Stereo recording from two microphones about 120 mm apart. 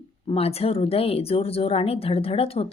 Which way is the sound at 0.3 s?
55° left (ahead or behind).